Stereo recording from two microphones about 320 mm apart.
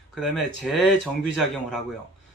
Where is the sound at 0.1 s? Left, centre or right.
Centre.